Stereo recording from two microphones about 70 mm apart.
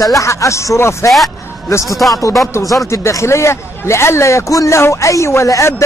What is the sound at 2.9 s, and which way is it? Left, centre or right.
A man's voice, left.